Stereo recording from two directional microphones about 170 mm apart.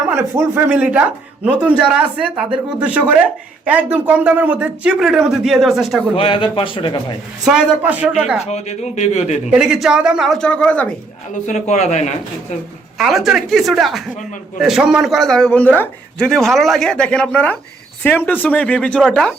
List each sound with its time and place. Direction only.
0.1 s speech: 15° right (ahead or behind)
6.1 s speech: 30° left (ahead or behind)
7.4 s speech: 5° right (ahead or behind)
8.4 s speech: 40° left (ahead or behind)
9.6 s speech: 5° right (ahead or behind)
11.4 s a man's voice: 45° left (ahead or behind)
13.0 s speech: centre (ahead or behind)